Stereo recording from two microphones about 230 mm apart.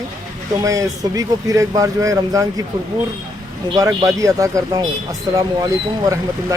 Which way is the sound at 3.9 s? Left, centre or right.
Centre.